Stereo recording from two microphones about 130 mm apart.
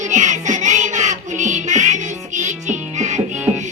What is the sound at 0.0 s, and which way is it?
Music, 70° right (ahead or behind).